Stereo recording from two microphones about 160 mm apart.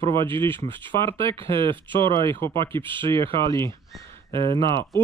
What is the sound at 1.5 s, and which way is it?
Speech, 30° right (ahead or behind).